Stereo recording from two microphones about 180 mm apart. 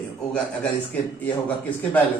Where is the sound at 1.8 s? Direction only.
10° left (ahead or behind).